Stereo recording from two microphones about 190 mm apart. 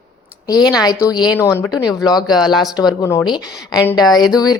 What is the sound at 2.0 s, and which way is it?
A woman's voice, 20° left (ahead or behind).